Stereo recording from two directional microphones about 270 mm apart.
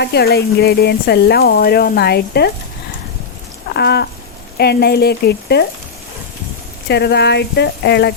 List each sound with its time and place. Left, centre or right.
0.0 s speech: left
3.8 s speech: left
6.8 s speech: left